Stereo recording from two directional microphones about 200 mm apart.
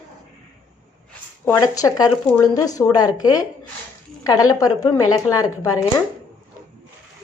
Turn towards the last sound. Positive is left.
turn(degrees=20)  # may be behind; listen again after turning